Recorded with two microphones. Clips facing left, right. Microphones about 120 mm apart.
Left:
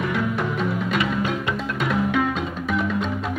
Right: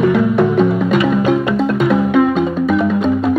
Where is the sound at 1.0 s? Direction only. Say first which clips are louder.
Right 10 dB; 85° right.